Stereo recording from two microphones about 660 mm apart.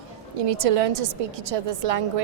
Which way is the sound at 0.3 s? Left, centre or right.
Right.